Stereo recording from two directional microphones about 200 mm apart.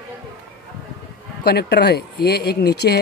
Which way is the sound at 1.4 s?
55° left (ahead or behind).